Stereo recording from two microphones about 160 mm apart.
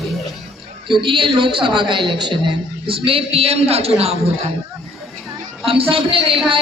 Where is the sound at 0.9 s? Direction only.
30° right (ahead or behind).